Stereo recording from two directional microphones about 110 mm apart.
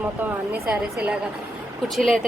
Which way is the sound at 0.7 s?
10° right (ahead or behind).